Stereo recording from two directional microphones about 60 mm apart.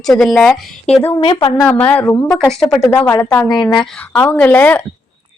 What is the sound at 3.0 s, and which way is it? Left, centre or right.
Speech, left.